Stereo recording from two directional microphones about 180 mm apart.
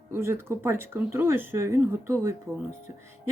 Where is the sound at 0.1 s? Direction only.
15° right (ahead or behind).